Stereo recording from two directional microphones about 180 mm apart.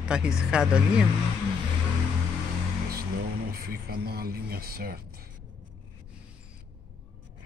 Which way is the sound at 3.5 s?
55° right (ahead or behind).